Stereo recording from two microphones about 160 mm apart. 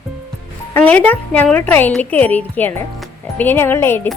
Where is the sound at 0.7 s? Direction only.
10° left (ahead or behind).